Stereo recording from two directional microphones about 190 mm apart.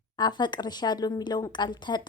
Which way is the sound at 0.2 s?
25° left (ahead or behind).